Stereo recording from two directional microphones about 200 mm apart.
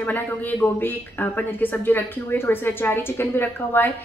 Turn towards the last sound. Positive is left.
turn(degrees=10)  # may be behind; listen again after turning